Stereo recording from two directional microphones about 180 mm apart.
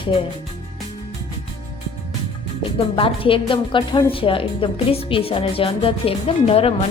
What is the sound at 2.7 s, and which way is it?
A woman's voice, 30° left (ahead or behind).